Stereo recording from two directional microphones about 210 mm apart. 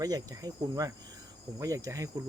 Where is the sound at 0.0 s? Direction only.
15° right (ahead or behind).